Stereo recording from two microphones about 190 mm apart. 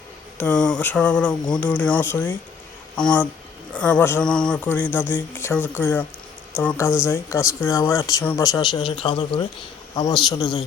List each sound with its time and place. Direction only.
0.3 s a man's voice: 5° left (ahead or behind); by 10.6 s 20° left (ahead or behind)